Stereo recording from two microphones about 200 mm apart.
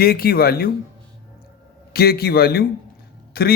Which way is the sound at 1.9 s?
50° left (ahead or behind).